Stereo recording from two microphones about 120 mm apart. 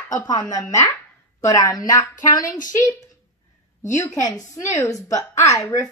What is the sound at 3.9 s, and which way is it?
A woman's voice, 30° left (ahead or behind).